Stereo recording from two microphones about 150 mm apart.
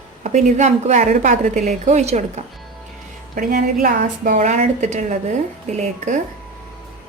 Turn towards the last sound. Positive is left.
turn(degrees=-50)  # may be behind; listen again after turning